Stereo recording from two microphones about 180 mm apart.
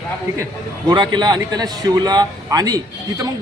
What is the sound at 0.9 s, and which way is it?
A man's voice, 25° right (ahead or behind).